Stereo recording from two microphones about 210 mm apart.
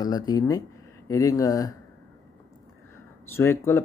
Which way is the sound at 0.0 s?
20° left (ahead or behind).